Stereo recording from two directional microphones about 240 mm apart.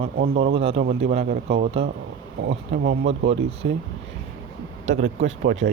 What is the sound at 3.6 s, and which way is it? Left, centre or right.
Speech, right.